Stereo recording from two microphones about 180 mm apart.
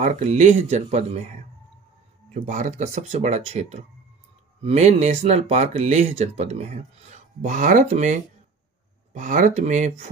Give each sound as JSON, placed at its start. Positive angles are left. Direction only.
{"t": 0.0, "sound": "speech", "side_deg": -40}
{"t": 2.3, "sound": "speech", "side_deg": -40}